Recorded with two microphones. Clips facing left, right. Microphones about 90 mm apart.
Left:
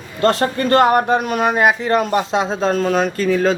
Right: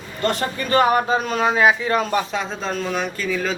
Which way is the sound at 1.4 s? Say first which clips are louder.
Left 1 dB; 55° left (ahead or behind).